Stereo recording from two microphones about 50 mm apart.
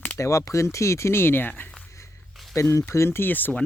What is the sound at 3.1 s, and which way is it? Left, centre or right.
Speech, left.